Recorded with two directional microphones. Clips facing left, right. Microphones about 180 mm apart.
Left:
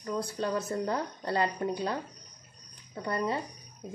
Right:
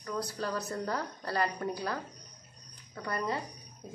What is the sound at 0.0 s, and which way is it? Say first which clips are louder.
Speech: left 3 dB; 25° left (ahead or behind).